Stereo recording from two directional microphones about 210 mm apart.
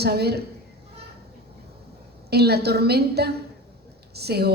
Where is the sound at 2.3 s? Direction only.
50° right (ahead or behind).